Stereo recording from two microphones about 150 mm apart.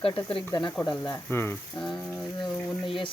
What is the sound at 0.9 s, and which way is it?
Speech, 20° left (ahead or behind).